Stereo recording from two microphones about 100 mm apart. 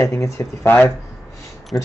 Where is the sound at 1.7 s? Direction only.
25° left (ahead or behind).